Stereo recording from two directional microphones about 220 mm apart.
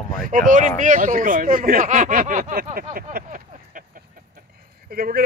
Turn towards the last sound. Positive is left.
turn(degrees=-40)  # may be behind; listen again after turning